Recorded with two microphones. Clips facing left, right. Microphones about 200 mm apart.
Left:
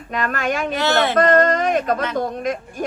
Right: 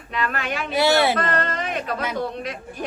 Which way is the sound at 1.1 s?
45° left (ahead or behind).